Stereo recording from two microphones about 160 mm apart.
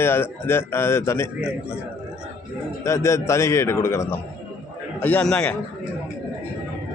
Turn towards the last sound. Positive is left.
turn(degrees=5)  # may be behind; listen again after turning